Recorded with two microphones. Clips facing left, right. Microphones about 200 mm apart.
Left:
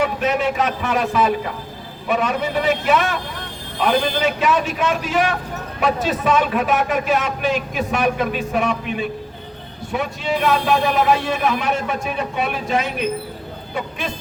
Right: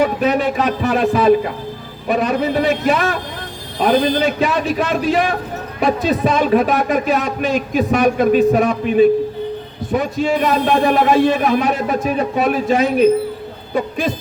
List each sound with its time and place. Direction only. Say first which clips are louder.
0.0 s a man's voice: right 4 dB; 35° right (ahead or behind)